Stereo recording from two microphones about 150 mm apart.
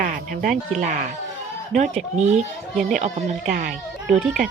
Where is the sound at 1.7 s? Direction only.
50° right (ahead or behind).